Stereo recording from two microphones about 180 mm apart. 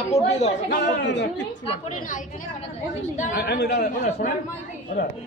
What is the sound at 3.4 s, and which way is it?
Speech, 60° left (ahead or behind).